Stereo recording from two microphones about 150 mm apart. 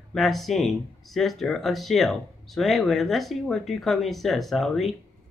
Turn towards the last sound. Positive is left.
turn(degrees=0)  # may be behind; listen again after turning